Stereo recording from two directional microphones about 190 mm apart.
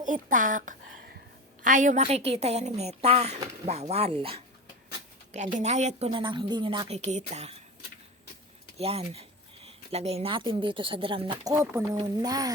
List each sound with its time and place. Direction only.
0.0 s a woman's voice: 45° right (ahead or behind)
5.3 s a woman's voice: 40° right (ahead or behind)
8.8 s a woman's voice: 30° right (ahead or behind)
11.5 s speech: 10° right (ahead or behind)